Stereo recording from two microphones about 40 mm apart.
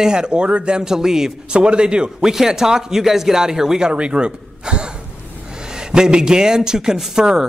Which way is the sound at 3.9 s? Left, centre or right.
Right.